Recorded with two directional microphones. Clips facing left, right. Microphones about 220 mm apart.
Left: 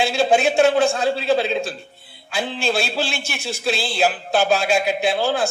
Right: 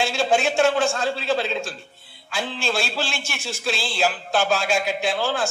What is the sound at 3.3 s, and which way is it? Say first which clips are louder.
Speech: left 4 dB; 60° left (ahead or behind).